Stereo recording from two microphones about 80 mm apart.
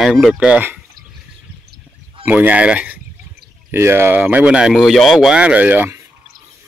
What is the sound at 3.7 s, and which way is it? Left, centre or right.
Speech, right.